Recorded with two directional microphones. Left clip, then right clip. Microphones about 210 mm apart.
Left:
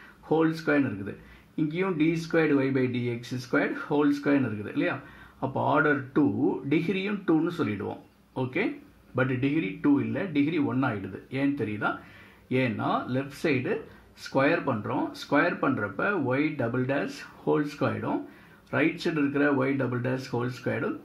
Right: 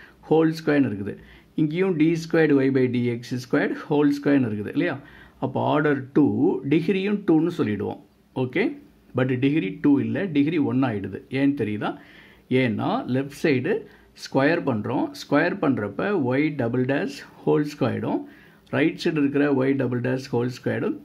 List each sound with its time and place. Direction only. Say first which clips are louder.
0.3 s speech: right 4 dB; 30° right (ahead or behind)